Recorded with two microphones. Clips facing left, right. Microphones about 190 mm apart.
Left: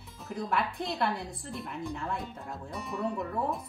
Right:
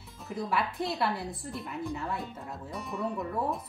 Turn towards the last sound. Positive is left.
turn(degrees=0)  # may be behind; listen again after turning